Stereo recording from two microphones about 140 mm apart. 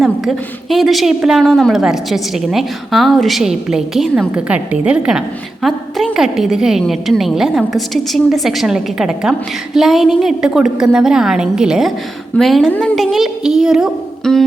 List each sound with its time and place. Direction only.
0.0 s a woman's voice: centre (ahead or behind)